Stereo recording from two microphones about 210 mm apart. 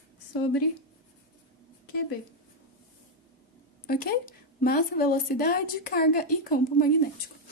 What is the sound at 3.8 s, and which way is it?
A woman's voice, 45° left (ahead or behind).